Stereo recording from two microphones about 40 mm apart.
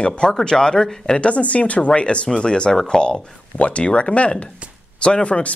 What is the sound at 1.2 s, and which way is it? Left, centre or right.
A man's voice, left.